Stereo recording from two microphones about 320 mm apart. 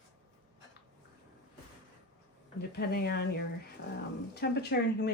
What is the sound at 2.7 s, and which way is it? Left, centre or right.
Speech, left.